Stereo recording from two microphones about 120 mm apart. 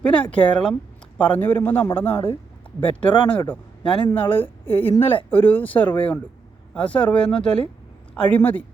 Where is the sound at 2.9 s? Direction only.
45° left (ahead or behind).